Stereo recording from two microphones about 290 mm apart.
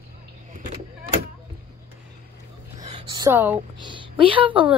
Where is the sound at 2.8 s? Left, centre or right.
Centre.